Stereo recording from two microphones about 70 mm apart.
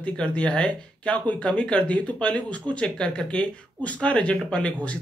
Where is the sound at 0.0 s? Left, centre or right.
Centre.